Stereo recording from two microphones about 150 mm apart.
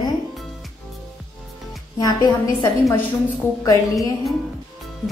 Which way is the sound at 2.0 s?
25° left (ahead or behind).